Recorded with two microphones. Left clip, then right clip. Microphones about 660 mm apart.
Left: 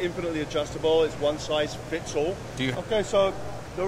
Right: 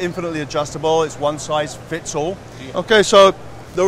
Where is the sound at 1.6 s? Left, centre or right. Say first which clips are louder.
Right 5 dB; right.